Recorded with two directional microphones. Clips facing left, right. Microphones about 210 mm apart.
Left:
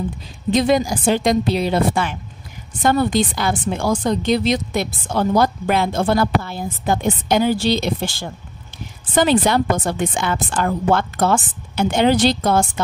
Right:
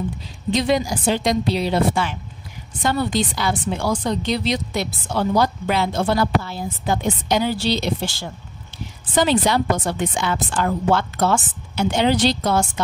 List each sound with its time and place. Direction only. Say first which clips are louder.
0.5 s speech: left 3 dB; 50° left (ahead or behind)